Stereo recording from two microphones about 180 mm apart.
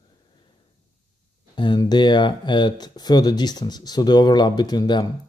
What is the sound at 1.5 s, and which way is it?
Speech, 25° left (ahead or behind).